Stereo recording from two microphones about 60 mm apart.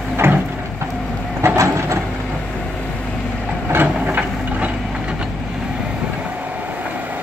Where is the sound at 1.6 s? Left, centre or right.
Right.